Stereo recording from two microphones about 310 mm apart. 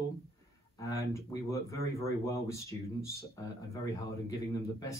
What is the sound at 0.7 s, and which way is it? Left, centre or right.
Speech, centre.